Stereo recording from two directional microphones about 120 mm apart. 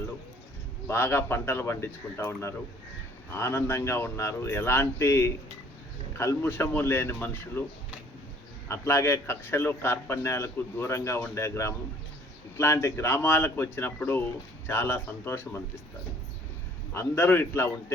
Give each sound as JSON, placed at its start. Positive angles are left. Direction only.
{"t": 0.9, "sound": "a man's voice", "side_deg": 20}
{"t": 8.6, "sound": "a man's voice", "side_deg": 20}
{"t": 16.9, "sound": "a man's voice", "side_deg": 20}